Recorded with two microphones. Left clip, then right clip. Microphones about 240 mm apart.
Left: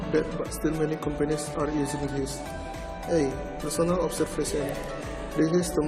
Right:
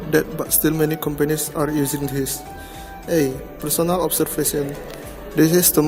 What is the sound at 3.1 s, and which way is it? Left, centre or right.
Speech, right.